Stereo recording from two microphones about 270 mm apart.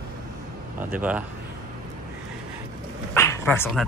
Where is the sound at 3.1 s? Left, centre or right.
Centre.